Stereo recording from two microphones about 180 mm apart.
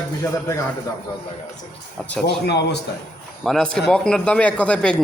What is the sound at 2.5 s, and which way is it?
Speech, 70° left (ahead or behind).